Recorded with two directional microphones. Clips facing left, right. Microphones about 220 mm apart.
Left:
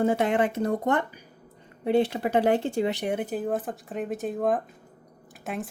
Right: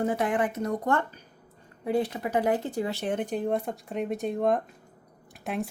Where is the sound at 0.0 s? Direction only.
25° left (ahead or behind).